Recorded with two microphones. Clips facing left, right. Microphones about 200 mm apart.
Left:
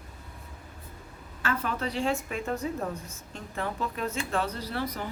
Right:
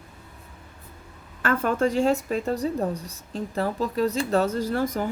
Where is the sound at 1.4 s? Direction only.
50° right (ahead or behind).